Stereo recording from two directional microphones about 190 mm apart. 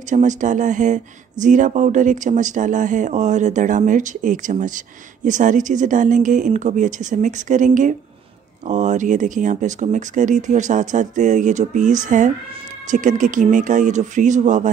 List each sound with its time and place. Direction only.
0.1 s speech: 40° right (ahead or behind)